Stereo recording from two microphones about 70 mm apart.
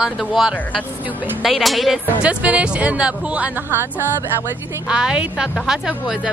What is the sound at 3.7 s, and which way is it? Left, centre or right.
Speech, right.